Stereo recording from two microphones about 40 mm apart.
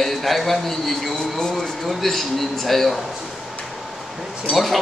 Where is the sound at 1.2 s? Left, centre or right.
Centre.